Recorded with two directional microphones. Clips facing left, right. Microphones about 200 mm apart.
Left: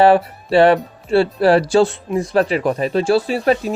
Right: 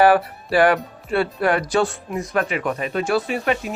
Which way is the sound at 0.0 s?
25° left (ahead or behind).